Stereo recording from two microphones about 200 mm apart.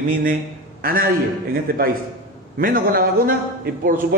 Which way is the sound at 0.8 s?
45° right (ahead or behind).